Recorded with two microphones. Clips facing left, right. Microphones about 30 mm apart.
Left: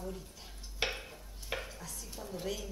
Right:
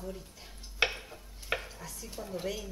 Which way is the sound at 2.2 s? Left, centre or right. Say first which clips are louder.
Right 4 dB; right.